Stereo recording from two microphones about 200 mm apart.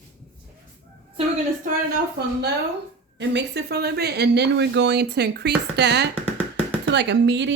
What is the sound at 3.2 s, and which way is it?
Speech, 60° right (ahead or behind).